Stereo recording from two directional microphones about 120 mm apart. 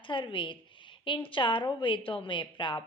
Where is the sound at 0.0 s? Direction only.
45° left (ahead or behind).